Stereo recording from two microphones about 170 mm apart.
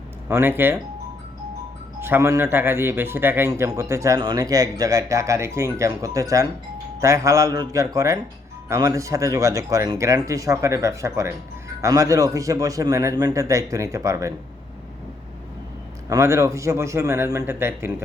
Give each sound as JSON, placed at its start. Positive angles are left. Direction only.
{"t": 0.3, "sound": "speech", "side_deg": -15}
{"t": 2.0, "sound": "a man's voice", "side_deg": -15}
{"t": 16.0, "sound": "speech", "side_deg": -20}